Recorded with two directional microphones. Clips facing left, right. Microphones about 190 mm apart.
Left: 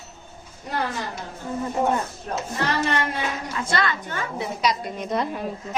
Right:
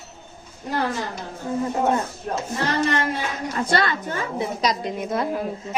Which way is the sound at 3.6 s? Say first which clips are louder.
Right 4 dB; 45° right (ahead or behind).